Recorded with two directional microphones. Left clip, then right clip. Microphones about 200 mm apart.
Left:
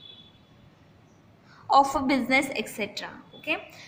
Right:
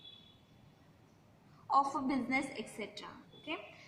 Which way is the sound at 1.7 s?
45° left (ahead or behind).